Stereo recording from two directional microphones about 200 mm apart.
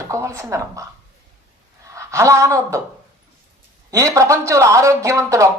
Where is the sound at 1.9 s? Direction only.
15° right (ahead or behind).